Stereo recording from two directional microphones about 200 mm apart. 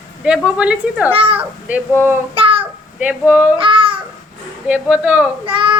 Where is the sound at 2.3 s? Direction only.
30° right (ahead or behind).